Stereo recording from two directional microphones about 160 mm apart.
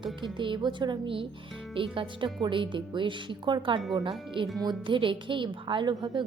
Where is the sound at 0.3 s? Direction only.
30° right (ahead or behind).